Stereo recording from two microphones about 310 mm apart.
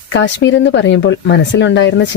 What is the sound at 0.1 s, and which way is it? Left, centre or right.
Speech, left.